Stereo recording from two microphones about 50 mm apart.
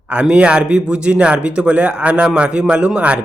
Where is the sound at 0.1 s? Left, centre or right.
Right.